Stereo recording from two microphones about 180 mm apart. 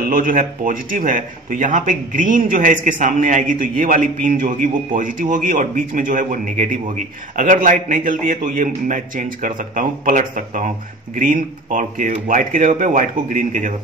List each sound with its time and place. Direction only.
0.0 s speech: 50° right (ahead or behind)